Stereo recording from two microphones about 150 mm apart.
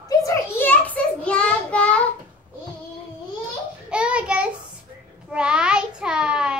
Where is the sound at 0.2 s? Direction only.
15° left (ahead or behind).